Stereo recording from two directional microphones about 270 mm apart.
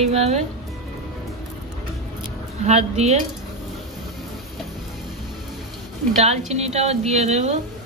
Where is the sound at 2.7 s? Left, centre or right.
Right.